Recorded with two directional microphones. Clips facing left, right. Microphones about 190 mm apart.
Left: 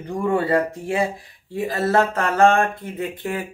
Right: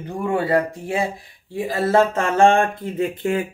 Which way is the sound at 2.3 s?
25° right (ahead or behind).